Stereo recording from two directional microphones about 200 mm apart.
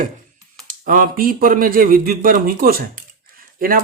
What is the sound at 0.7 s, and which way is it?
Speech, 45° right (ahead or behind).